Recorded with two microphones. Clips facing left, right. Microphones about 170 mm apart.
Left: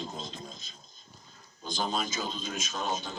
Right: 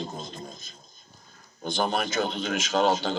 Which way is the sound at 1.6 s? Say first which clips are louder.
Right 5 dB; 65° right (ahead or behind).